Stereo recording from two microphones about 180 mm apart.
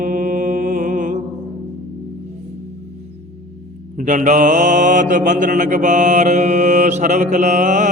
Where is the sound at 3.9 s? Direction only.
45° right (ahead or behind).